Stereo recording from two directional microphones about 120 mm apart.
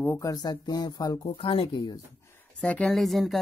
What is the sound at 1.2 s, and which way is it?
Speech, 50° left (ahead or behind).